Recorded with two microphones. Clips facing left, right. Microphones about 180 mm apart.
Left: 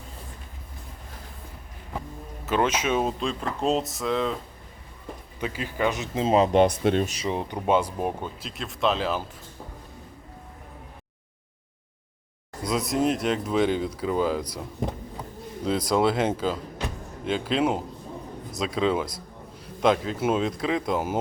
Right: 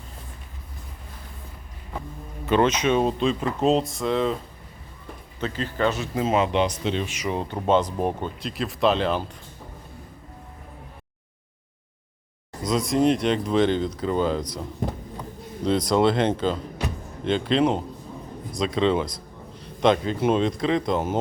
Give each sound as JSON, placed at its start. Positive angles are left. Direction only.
{"t": 2.5, "sound": "speech", "side_deg": 5}
{"t": 5.4, "sound": "speech", "side_deg": 10}
{"t": 7.2, "sound": "speech", "side_deg": 20}
{"t": 12.6, "sound": "speech", "side_deg": 5}
{"t": 15.6, "sound": "speech", "side_deg": 5}